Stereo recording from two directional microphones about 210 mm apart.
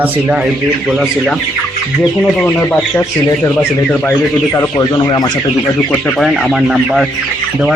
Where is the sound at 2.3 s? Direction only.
5° left (ahead or behind).